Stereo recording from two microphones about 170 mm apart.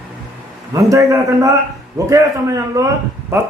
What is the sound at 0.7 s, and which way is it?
Speech, 20° right (ahead or behind).